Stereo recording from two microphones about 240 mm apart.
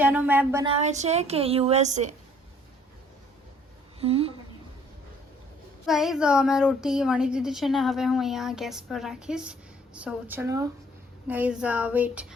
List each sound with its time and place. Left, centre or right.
0.0 s speech: centre
0.6 s a woman's voice: right
4.0 s a woman's voice: right
5.8 s a woman's voice: centre